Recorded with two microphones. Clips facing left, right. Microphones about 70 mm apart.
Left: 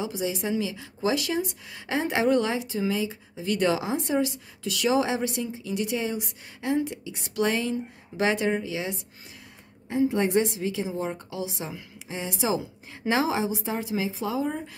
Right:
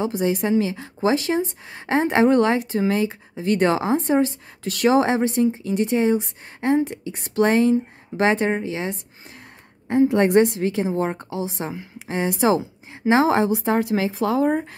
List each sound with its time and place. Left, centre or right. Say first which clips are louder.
0.0 s speech: right 7 dB; right
10.0 s speech: right 7 dB; right
12.1 s speech: right 8 dB; right